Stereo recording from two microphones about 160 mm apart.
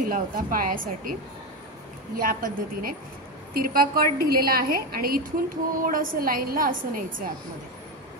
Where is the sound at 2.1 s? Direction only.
60° right (ahead or behind).